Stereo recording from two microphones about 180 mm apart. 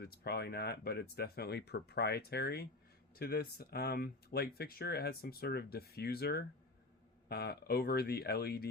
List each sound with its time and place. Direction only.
0.0 s speech: 65° left (ahead or behind)